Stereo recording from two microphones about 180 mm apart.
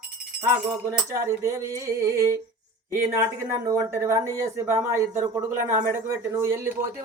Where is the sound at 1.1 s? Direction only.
15° right (ahead or behind).